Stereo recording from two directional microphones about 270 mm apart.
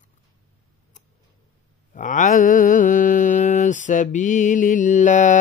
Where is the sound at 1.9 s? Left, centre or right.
Left.